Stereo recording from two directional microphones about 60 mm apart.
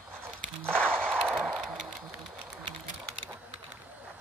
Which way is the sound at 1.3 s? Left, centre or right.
Centre.